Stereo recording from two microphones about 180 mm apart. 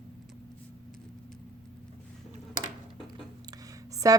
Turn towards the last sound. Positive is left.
turn(degrees=-20)  # may be behind; listen again after turning